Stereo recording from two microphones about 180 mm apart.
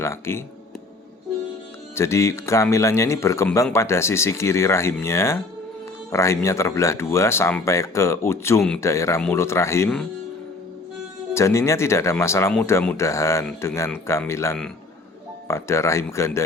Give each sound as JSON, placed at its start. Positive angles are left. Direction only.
{"t": 0.0, "sound": "speech", "side_deg": 15}
{"t": 2.0, "sound": "speech", "side_deg": 15}
{"t": 11.3, "sound": "speech", "side_deg": 15}